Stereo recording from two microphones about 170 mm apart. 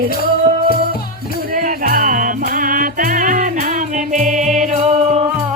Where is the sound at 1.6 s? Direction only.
60° right (ahead or behind).